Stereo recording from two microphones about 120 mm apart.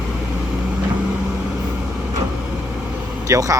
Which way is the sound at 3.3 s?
25° right (ahead or behind).